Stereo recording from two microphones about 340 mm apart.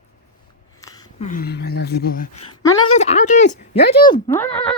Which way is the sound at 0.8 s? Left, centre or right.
Centre.